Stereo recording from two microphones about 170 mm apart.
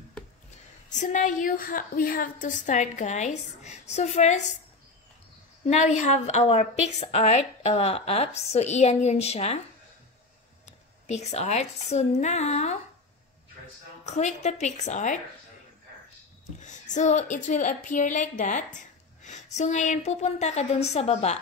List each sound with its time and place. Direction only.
0.8 s a woman's voice: 45° left (ahead or behind)
5.7 s a woman's voice: 45° left (ahead or behind)
11.1 s a woman's voice: 40° left (ahead or behind)
14.0 s a woman's voice: 40° left (ahead or behind)
16.6 s a woman's voice: 45° left (ahead or behind)